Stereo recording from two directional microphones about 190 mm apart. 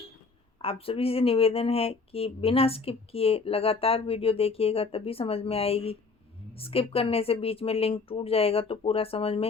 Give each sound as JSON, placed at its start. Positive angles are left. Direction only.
{"t": 0.6, "sound": "speech", "side_deg": 30}